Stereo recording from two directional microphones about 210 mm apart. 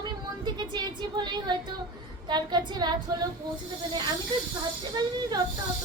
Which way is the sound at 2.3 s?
20° right (ahead or behind).